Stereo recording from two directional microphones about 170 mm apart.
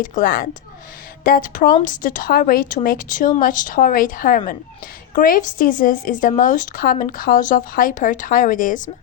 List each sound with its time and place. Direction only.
0.0 s a woman's voice: 55° left (ahead or behind)